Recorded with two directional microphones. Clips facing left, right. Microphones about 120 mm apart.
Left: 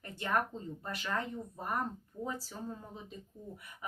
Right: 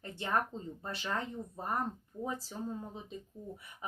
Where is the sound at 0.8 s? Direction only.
25° right (ahead or behind).